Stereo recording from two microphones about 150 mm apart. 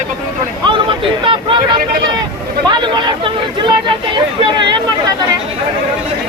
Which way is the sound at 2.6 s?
30° right (ahead or behind).